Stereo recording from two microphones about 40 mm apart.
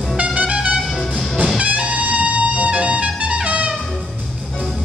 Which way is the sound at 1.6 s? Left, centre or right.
Right.